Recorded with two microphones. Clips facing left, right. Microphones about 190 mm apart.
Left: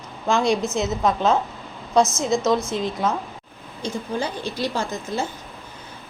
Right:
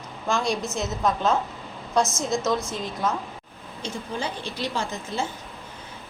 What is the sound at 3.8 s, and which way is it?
Speech, 40° left (ahead or behind).